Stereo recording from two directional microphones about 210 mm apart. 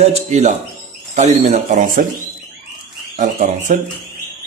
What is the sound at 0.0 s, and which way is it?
Speech, 30° right (ahead or behind).